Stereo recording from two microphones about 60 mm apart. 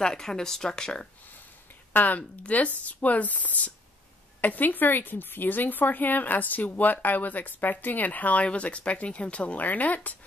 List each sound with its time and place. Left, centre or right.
0.0 s speech: centre
2.0 s speech: left